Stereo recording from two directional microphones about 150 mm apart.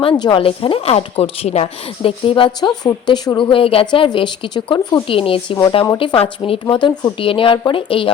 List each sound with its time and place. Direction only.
0.2 s speech: 35° left (ahead or behind)